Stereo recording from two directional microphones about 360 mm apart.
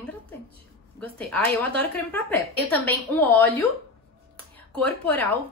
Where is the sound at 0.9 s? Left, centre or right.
Centre.